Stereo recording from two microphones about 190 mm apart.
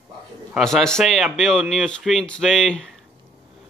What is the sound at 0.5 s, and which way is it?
A man's voice, centre (ahead or behind).